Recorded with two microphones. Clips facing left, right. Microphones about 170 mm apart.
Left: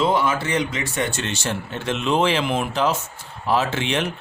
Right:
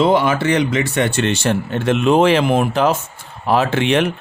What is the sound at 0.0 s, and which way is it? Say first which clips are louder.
Speech: right 6 dB; 70° right (ahead or behind).